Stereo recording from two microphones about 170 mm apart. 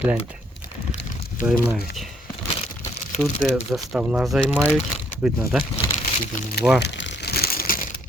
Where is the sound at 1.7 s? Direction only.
5° right (ahead or behind).